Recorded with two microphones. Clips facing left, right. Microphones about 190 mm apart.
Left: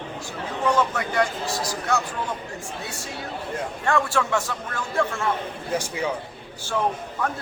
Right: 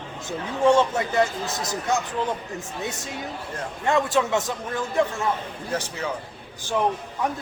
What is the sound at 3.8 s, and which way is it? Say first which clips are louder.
Speech: right 2 dB; 20° right (ahead or behind).